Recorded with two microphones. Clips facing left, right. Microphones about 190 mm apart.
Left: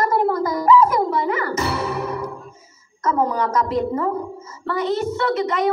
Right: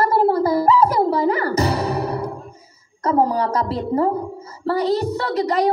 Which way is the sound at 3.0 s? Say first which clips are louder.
Right 2 dB; 35° right (ahead or behind).